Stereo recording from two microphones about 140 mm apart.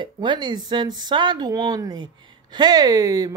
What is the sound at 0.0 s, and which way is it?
Speech, 35° right (ahead or behind).